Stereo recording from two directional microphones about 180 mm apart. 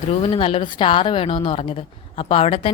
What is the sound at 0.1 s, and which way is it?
A woman's voice, 30° left (ahead or behind).